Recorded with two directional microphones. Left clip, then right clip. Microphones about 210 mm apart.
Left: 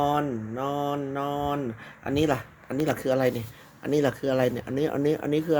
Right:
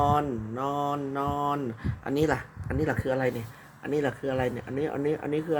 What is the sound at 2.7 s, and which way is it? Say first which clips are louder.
Speech: left 3 dB; 30° left (ahead or behind).